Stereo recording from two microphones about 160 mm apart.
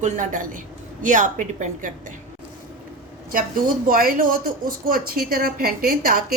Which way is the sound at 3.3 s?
60° right (ahead or behind).